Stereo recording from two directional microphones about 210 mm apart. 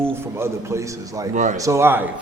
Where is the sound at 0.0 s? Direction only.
10° right (ahead or behind).